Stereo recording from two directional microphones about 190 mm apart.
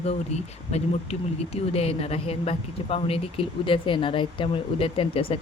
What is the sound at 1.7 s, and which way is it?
Speech, 30° left (ahead or behind).